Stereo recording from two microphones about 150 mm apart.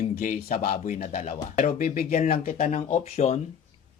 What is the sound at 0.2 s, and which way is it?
Speech, 60° left (ahead or behind).